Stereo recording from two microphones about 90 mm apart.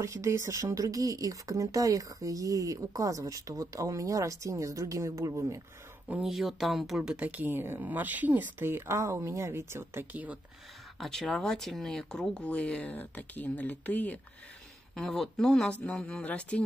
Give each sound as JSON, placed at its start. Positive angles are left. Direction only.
{"t": 0.0, "sound": "speech", "side_deg": -35}
{"t": 6.2, "sound": "speech", "side_deg": 0}
{"t": 7.1, "sound": "speech", "side_deg": -15}
{"t": 10.1, "sound": "speech", "side_deg": -15}
{"t": 11.0, "sound": "speech", "side_deg": 5}
{"t": 15.0, "sound": "speech", "side_deg": 5}